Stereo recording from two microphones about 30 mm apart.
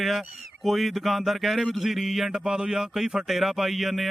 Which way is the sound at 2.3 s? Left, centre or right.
Right.